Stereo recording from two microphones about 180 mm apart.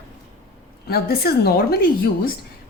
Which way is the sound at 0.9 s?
60° left (ahead or behind).